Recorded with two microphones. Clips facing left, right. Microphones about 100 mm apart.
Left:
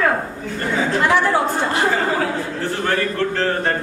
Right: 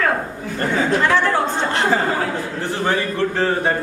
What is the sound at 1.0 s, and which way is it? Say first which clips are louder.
Speech: left 1 dB; 15° left (ahead or behind).